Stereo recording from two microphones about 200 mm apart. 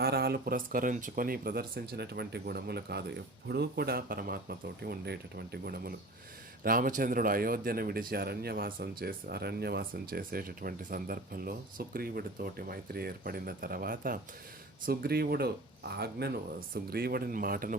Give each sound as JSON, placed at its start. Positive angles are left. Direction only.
{"t": 0.0, "sound": "speech", "side_deg": -50}